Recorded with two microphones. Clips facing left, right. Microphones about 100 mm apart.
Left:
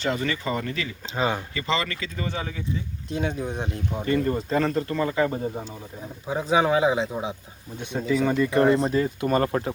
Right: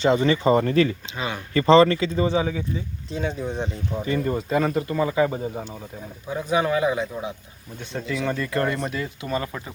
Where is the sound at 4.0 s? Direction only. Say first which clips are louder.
Left 1 dB; 15° right (ahead or behind).